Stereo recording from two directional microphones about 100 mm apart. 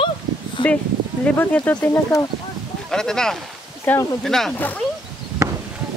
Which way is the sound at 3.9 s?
15° left (ahead or behind).